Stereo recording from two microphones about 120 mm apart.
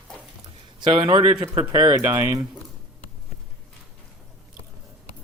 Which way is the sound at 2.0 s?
20° right (ahead or behind).